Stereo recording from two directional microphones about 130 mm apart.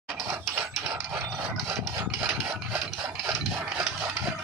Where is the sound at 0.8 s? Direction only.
20° right (ahead or behind).